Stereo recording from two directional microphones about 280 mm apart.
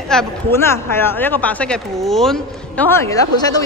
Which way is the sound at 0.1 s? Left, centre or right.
Centre.